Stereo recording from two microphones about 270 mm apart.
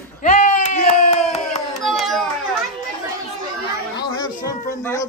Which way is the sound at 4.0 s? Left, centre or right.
Centre.